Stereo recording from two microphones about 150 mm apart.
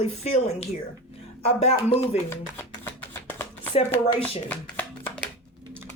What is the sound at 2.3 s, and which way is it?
Speech, 15° left (ahead or behind).